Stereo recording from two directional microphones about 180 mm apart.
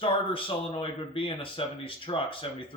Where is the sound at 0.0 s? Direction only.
30° left (ahead or behind).